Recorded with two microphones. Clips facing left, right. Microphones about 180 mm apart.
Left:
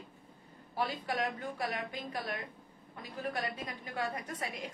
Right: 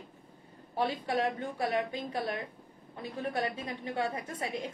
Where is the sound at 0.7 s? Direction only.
30° right (ahead or behind).